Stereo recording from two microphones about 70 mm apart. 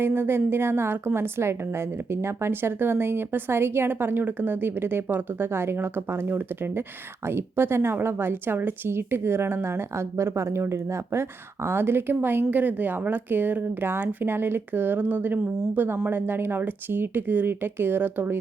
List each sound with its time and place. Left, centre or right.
0.0 s a woman's voice: right